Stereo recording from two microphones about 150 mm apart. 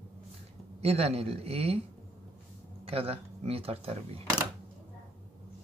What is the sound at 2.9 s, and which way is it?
Speech, 40° right (ahead or behind).